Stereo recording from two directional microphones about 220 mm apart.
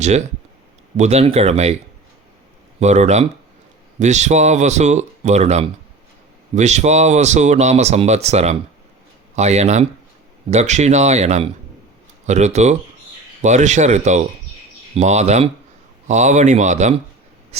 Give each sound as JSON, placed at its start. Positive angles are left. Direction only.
{"t": 0.0, "sound": "speech", "side_deg": -30}
{"t": 2.8, "sound": "speech", "side_deg": -30}